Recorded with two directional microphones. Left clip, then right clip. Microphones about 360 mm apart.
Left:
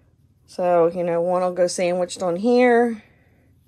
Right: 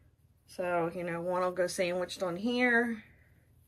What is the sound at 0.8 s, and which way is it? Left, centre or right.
Speech, centre.